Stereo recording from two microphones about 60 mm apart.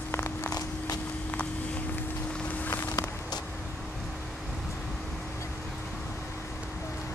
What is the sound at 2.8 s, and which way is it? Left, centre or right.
Walk, left.